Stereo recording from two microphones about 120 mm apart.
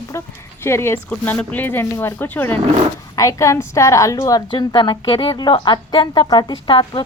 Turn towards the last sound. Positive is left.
turn(degrees=40)  # may be behind; listen again after turning